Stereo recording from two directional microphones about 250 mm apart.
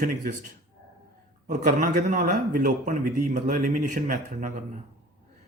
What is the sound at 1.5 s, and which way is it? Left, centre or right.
A man's voice, right.